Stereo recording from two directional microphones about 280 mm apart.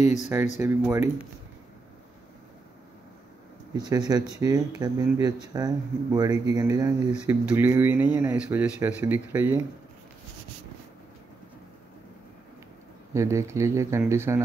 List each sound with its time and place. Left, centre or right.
0.0 s speech: left
0.6 s speech: centre
3.7 s speech: centre
13.1 s speech: centre